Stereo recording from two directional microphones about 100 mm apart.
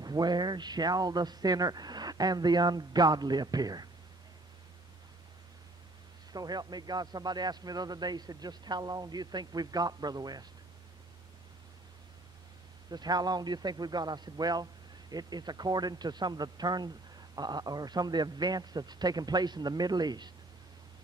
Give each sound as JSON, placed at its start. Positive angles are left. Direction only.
{"t": 0.0, "sound": "speech", "side_deg": -45}
{"t": 6.3, "sound": "a man's voice", "side_deg": -40}
{"t": 12.9, "sound": "speech", "side_deg": -45}